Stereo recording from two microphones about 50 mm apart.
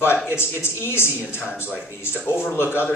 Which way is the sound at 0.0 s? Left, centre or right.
Left.